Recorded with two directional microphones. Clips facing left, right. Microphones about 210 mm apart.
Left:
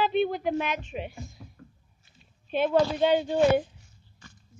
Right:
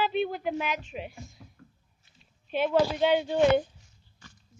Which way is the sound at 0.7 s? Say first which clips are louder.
Left 2 dB; 50° left (ahead or behind).